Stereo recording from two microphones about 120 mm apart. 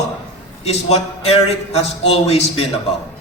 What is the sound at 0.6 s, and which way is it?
Speech, 60° left (ahead or behind).